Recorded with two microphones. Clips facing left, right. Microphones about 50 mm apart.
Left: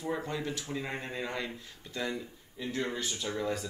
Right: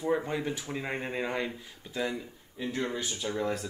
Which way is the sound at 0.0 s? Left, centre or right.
Right.